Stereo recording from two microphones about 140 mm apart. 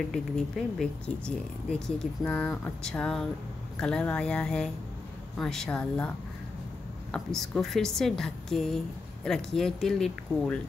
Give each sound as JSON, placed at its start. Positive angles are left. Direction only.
{"t": 0.1, "sound": "a woman's voice", "side_deg": 0}